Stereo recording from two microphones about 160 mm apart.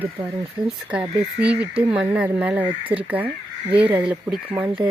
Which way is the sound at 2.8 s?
35° right (ahead or behind).